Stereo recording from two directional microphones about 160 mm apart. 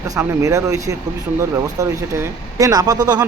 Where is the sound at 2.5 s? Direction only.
20° right (ahead or behind).